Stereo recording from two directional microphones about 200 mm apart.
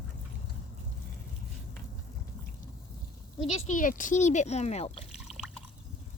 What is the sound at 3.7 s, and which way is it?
Speech, 40° left (ahead or behind).